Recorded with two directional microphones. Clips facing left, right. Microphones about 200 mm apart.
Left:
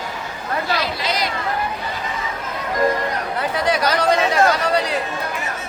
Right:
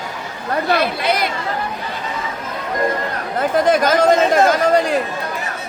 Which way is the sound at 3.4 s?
50° right (ahead or behind).